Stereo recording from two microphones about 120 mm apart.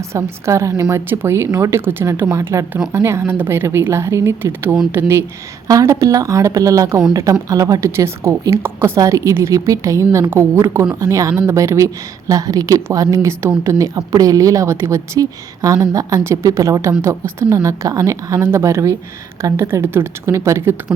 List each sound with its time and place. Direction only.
0.1 s a woman's voice: 25° right (ahead or behind)